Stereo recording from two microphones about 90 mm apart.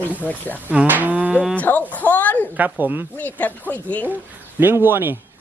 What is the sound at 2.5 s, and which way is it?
Cattle, 20° right (ahead or behind).